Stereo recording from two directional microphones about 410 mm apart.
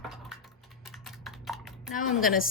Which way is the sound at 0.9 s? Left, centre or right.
Centre.